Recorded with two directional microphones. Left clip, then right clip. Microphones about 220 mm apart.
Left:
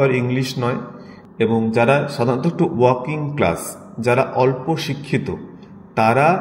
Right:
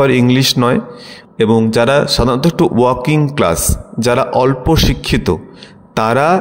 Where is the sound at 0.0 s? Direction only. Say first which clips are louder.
Right 7 dB; 50° right (ahead or behind).